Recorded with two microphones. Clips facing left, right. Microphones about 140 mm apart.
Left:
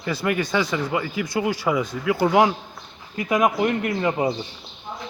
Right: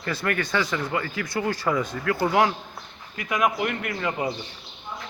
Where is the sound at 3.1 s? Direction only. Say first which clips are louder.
Left 4 dB; 25° left (ahead or behind).